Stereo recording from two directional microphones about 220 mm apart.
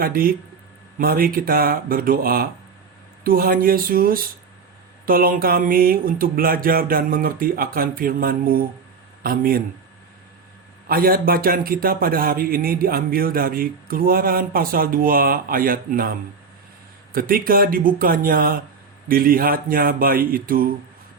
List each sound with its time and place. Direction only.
0.0 s a man's voice: 40° right (ahead or behind)
10.8 s a man's voice: 40° right (ahead or behind)